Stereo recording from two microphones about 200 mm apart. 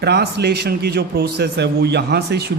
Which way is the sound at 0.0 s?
55° right (ahead or behind).